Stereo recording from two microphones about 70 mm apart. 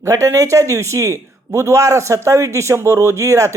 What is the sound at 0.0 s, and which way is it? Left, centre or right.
A man's voice, right.